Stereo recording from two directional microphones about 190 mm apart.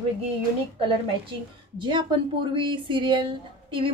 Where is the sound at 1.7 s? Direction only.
25° right (ahead or behind).